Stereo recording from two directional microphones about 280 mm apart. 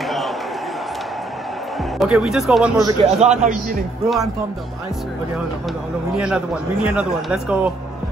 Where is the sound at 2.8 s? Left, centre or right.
Right.